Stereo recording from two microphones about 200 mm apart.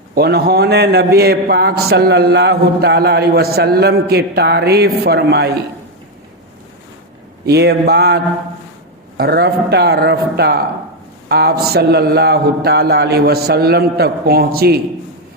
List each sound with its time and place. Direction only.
0.1 s a man's voice: 55° right (ahead or behind)
7.4 s a man's voice: 55° right (ahead or behind)